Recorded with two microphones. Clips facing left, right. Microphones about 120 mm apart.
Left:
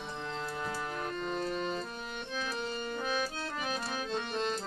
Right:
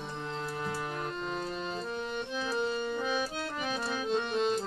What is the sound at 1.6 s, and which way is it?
Accordion, 20° right (ahead or behind).